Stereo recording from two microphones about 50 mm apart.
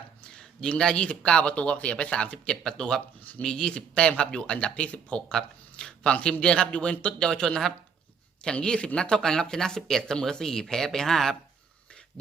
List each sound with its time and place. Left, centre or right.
0.3 s a sound: centre
0.8 s speech: centre
2.5 s speech: centre